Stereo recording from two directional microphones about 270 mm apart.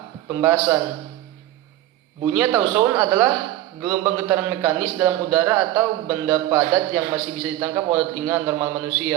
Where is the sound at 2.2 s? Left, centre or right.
Centre.